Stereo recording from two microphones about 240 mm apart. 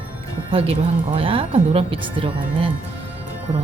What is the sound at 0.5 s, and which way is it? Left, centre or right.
Speech, right.